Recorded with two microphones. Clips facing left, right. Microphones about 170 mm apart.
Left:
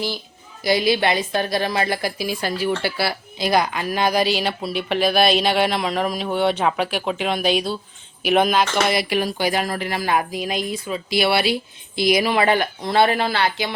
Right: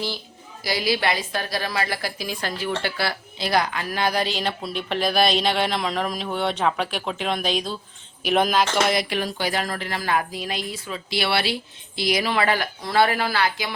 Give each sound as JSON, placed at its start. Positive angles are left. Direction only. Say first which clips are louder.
{"t": 0.6, "sound": "a woman's voice", "louder": "left 5 dB", "side_deg": 20}